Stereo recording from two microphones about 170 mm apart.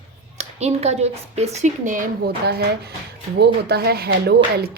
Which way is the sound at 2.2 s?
70° right (ahead or behind).